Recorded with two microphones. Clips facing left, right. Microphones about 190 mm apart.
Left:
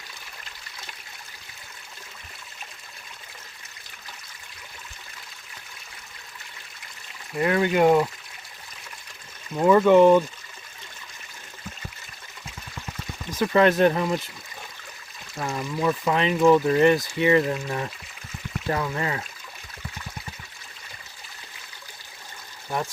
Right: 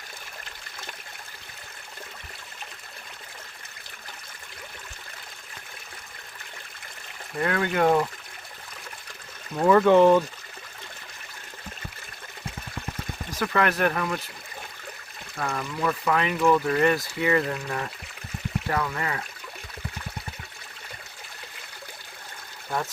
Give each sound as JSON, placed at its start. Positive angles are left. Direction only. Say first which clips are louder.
{"t": 7.3, "sound": "speech", "louder": "left 4 dB", "side_deg": 15}
{"t": 9.6, "sound": "speech", "louder": "left 2 dB", "side_deg": 10}
{"t": 13.4, "sound": "speech", "louder": "left 6 dB", "side_deg": 25}
{"t": 15.4, "sound": "speech", "louder": "left 2 dB", "side_deg": 20}